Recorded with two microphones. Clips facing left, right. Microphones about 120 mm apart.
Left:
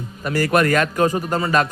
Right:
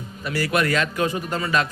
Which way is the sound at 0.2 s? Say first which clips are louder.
Left 5 dB; 45° left (ahead or behind).